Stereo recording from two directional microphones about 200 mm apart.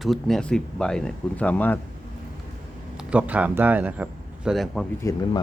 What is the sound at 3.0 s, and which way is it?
A man's voice, 5° right (ahead or behind).